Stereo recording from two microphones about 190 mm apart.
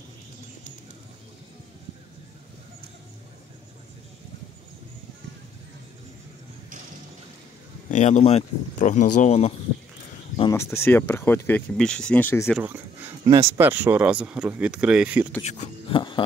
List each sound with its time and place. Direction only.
7.9 s speech: 35° left (ahead or behind)
10.5 s speech: 15° left (ahead or behind)
12.4 s speech: 10° right (ahead or behind)
15.4 s speech: 40° left (ahead or behind)
15.9 s a sound: 25° left (ahead or behind)